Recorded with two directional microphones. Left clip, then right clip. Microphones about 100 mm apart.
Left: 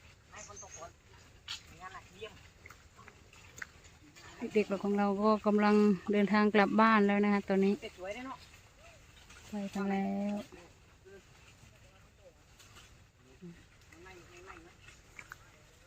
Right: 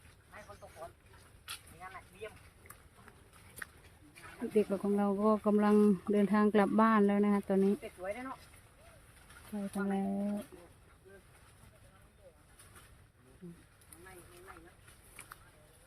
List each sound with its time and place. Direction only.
1.5 s vehicle: 80° right
4.4 s speech: 20° right (ahead or behind)
4.7 s speech: 10° right (ahead or behind)
7.8 s speech: 35° right (ahead or behind)
9.5 s speech: 20° right (ahead or behind)
9.9 s speech: 5° right (ahead or behind)